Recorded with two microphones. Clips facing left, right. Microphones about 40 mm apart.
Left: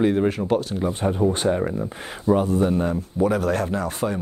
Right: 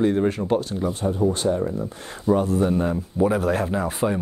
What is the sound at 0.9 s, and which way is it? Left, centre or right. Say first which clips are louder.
Speech: left 1 dB; left.